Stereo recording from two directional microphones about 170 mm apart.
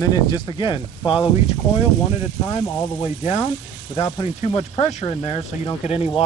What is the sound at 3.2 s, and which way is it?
Speech, 40° left (ahead or behind).